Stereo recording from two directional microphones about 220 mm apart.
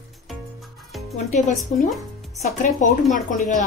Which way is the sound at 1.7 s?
35° left (ahead or behind).